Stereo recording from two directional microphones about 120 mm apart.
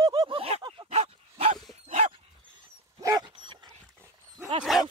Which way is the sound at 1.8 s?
70° right (ahead or behind).